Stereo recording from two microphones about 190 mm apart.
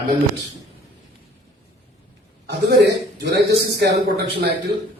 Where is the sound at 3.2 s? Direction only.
60° right (ahead or behind).